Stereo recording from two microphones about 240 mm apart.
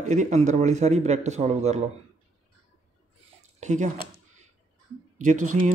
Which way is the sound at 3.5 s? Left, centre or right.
Right.